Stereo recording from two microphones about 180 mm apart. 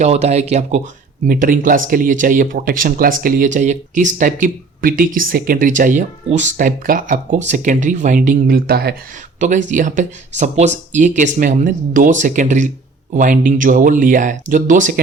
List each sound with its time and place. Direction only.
0.0 s speech: 40° right (ahead or behind)
1.3 s speech: 50° right (ahead or behind)
9.4 s speech: 40° right (ahead or behind)